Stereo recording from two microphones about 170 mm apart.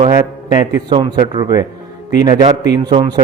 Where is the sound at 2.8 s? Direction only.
30° right (ahead or behind).